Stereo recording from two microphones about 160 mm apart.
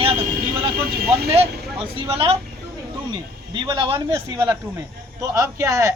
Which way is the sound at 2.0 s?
35° right (ahead or behind).